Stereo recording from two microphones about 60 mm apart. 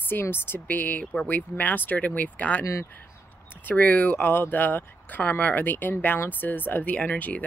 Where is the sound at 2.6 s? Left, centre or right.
Left.